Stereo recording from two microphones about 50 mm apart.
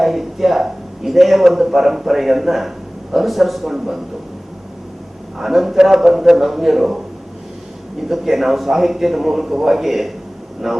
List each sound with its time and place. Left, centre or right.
0.0 s a man's voice: centre
5.4 s a man's voice: centre
8.0 s a man's voice: centre